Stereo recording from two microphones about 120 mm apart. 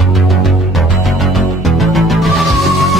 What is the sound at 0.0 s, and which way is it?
Music, centre (ahead or behind).